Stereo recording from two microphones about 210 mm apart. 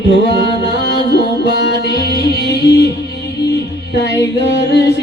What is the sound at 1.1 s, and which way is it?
Music, 50° left (ahead or behind).